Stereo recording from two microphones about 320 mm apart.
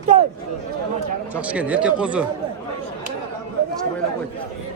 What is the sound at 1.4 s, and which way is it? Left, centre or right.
Speech, centre.